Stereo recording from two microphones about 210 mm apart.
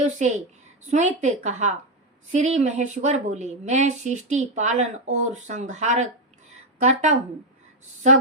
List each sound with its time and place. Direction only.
0.0 s a woman's voice: 35° right (ahead or behind)